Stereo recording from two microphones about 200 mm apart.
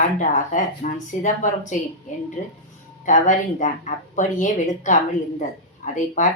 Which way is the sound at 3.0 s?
40° left (ahead or behind).